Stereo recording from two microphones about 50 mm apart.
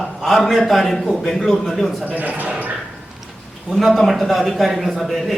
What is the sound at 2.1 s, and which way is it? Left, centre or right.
Speech, right.